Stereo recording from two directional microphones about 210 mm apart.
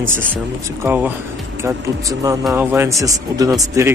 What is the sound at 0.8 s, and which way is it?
Speech, 10° right (ahead or behind).